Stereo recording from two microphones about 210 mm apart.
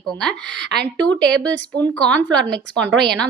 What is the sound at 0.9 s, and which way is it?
A woman's voice, 5° left (ahead or behind).